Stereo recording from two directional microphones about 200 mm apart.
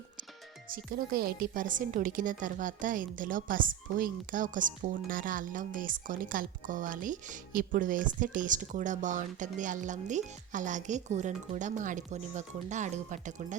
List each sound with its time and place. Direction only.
0.7 s a woman's voice: 50° right (ahead or behind)